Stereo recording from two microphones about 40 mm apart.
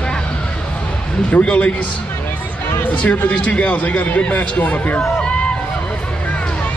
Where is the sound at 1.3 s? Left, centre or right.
Left.